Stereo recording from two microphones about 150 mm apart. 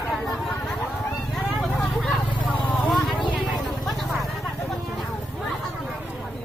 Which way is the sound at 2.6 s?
10° left (ahead or behind).